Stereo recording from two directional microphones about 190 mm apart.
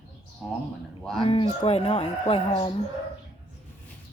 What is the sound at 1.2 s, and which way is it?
Speech, 30° left (ahead or behind).